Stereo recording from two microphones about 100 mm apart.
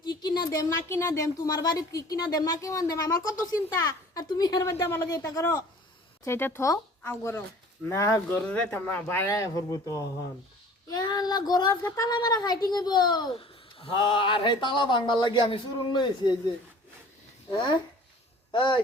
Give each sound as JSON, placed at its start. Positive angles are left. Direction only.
{"t": 0.0, "sound": "a sound", "side_deg": 45}
{"t": 0.9, "sound": "speech", "side_deg": 30}
{"t": 4.7, "sound": "speech", "side_deg": 25}
{"t": 13.3, "sound": "speech", "side_deg": 65}
{"t": 18.5, "sound": "speech", "side_deg": 50}